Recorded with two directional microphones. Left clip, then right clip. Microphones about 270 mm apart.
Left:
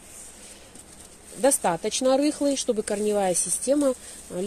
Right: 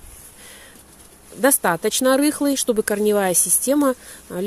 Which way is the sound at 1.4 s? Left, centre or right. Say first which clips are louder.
Right 4 dB; right.